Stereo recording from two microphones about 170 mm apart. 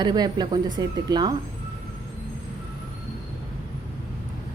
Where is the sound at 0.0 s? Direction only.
25° right (ahead or behind).